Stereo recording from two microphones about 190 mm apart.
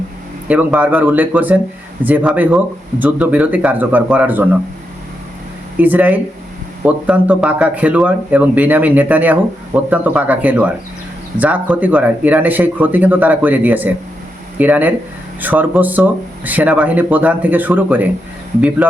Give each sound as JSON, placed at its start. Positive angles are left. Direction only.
{"t": 0.4, "sound": "speech", "side_deg": -10}
{"t": 5.7, "sound": "speech", "side_deg": -10}